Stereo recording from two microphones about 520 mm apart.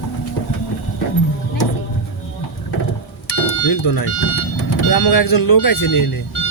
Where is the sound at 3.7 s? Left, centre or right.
Left.